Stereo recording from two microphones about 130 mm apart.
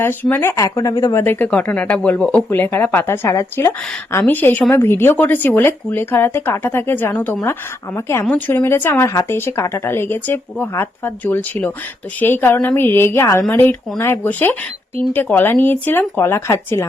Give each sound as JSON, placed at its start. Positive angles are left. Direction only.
{"t": 0.0, "sound": "speech", "side_deg": 15}